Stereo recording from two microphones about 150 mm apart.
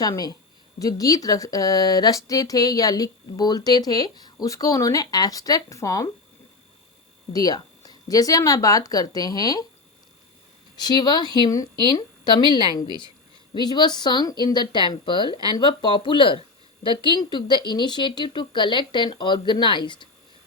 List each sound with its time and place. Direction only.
0.1 s speech: 25° left (ahead or behind)
7.3 s speech: 25° left (ahead or behind)
10.8 s speech: 30° left (ahead or behind)